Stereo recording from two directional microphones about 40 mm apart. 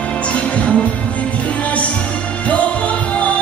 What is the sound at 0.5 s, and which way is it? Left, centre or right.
Music, left.